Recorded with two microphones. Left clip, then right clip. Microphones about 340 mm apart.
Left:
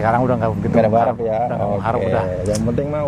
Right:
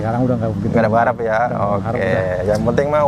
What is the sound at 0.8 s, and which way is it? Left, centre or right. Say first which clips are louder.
Speech: even; right.